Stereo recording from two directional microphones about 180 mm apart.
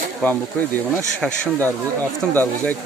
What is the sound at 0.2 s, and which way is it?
Speech, 5° left (ahead or behind).